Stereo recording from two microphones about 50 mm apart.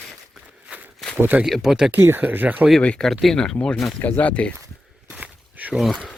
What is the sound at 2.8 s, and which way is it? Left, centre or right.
Speech, left.